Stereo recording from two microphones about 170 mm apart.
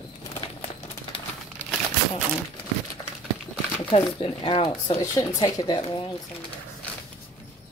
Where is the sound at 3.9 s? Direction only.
30° left (ahead or behind).